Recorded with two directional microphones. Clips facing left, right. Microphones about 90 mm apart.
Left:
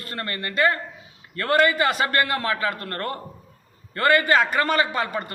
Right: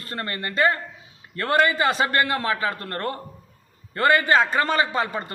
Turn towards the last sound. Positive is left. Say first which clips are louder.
# right 1 dB
turn(degrees=-25)  # may be behind; listen again after turning